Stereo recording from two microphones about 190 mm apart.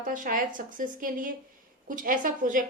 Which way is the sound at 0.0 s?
45° right (ahead or behind).